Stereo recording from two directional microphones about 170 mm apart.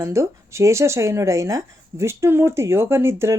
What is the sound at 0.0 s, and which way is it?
Speech, 15° right (ahead or behind).